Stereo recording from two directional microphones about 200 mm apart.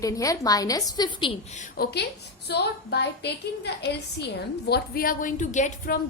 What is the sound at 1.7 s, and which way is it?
A woman's voice, 55° left (ahead or behind).